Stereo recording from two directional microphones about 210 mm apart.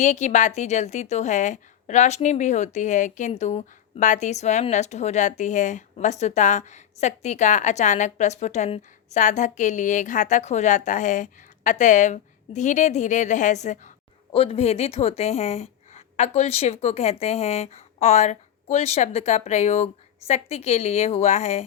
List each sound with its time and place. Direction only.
0.0 s a woman's voice: 35° left (ahead or behind)